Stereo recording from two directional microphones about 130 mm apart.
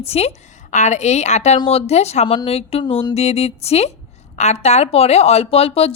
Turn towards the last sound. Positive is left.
turn(degrees=50)  # may be behind; listen again after turning